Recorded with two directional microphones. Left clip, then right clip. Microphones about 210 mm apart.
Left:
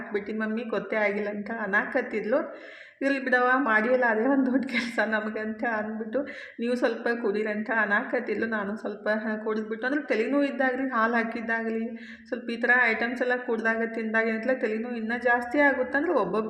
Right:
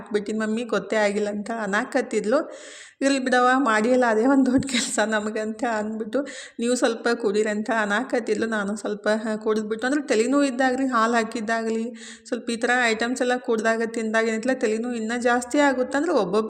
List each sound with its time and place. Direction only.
0.9 s a woman's voice: 40° right (ahead or behind)